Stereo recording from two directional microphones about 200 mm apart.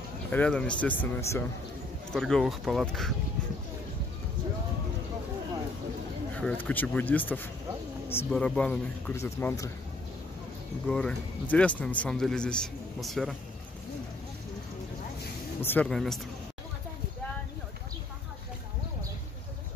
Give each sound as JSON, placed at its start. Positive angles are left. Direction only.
{"t": 0.3, "sound": "a man's voice", "side_deg": 5}
{"t": 6.3, "sound": "speech", "side_deg": 10}
{"t": 10.9, "sound": "a man's voice", "side_deg": 5}
{"t": 15.6, "sound": "a man's voice", "side_deg": 10}